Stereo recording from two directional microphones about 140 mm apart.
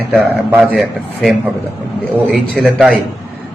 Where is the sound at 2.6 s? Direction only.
Centre (ahead or behind).